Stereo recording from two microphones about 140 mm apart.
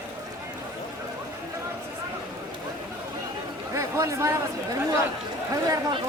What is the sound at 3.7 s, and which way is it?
Chatter, 20° right (ahead or behind).